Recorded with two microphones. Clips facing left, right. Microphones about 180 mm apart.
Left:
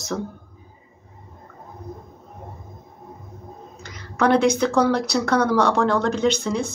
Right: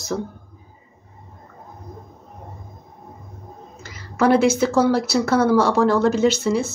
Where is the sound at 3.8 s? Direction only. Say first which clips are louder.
Right 2 dB; 5° right (ahead or behind).